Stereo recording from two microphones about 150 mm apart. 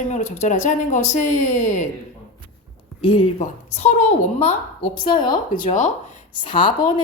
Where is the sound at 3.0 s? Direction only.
35° left (ahead or behind).